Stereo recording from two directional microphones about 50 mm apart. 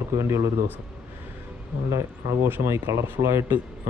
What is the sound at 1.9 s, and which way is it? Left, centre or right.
Speech, right.